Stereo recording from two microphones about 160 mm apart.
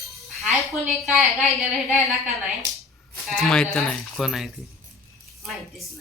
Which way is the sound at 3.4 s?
5° left (ahead or behind).